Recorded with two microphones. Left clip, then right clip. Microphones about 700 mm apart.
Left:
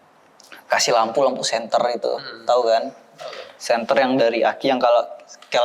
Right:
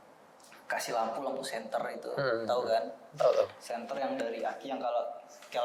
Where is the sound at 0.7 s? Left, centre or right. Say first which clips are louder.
Left 16 dB; left.